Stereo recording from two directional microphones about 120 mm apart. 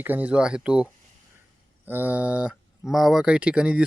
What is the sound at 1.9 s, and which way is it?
Speech, 15° right (ahead or behind).